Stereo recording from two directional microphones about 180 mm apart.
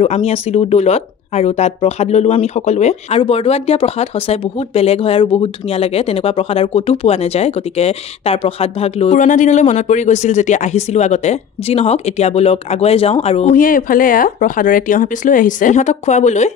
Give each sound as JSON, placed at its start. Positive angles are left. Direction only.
{"t": 0.0, "sound": "speech", "side_deg": 35}
{"t": 13.6, "sound": "speech", "side_deg": 50}